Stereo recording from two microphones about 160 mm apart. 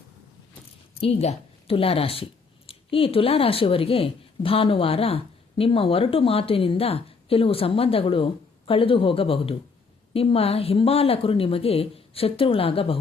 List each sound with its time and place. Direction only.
1.0 s speech: 40° left (ahead or behind)